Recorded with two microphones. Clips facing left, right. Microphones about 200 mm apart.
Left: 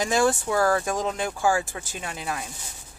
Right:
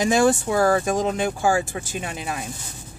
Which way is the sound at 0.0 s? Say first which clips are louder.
Right 4 dB; 20° right (ahead or behind).